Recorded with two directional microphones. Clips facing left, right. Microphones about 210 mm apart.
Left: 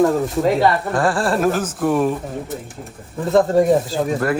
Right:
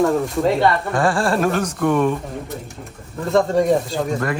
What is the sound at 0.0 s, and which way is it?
Speech, centre (ahead or behind).